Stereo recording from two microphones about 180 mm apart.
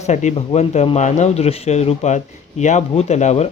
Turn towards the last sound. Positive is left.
turn(degrees=40)  # may be behind; listen again after turning